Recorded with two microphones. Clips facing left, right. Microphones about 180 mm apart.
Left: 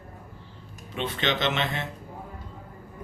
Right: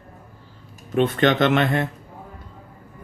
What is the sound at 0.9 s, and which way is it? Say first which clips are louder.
Speech: right 10 dB; 50° right (ahead or behind).